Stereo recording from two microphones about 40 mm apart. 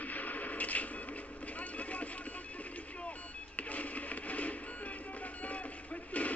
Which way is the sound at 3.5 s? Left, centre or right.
Left.